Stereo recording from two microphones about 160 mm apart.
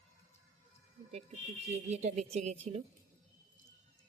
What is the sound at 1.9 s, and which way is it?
Speech, 45° right (ahead or behind).